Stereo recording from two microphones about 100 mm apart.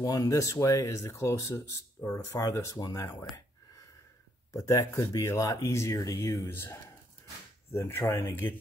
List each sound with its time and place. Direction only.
0.0 s speech: 35° left (ahead or behind)